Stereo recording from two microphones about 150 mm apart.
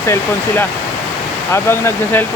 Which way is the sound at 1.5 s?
15° left (ahead or behind).